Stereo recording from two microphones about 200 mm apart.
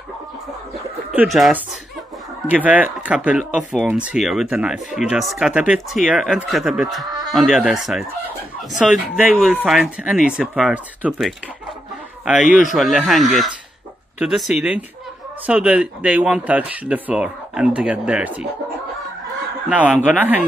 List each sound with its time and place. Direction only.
1.1 s speech: centre (ahead or behind)
7.1 s a sound: 20° right (ahead or behind)
7.3 s speech: centre (ahead or behind)
12.7 s speech: centre (ahead or behind)
19.7 s a man's voice: 5° right (ahead or behind)